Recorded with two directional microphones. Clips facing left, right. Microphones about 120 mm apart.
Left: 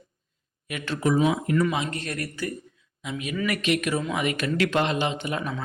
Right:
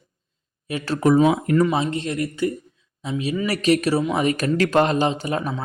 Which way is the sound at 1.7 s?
25° right (ahead or behind).